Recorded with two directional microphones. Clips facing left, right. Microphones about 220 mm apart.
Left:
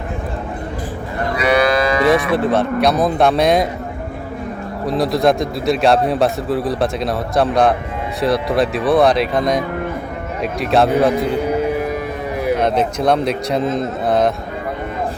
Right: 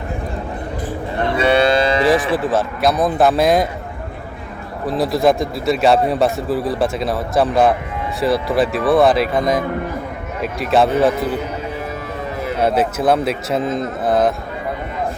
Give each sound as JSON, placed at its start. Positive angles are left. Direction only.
{"t": 1.2, "sound": "moo", "side_deg": -25}
{"t": 2.3, "sound": "a man's voice", "side_deg": 0}
{"t": 4.9, "sound": "a man's voice", "side_deg": 0}
{"t": 12.5, "sound": "a man's voice", "side_deg": -5}